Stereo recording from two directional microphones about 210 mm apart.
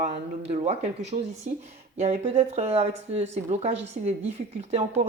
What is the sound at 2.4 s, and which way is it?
Speech, 30° right (ahead or behind).